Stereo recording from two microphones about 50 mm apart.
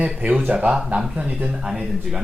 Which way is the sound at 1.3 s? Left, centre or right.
Right.